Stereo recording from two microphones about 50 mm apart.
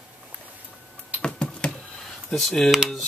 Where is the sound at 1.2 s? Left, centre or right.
Left.